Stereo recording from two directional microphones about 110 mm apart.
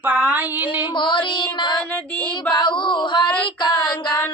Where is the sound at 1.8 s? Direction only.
15° left (ahead or behind).